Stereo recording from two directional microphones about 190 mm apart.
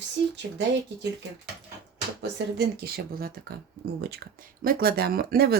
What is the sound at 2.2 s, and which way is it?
Speech, 60° right (ahead or behind).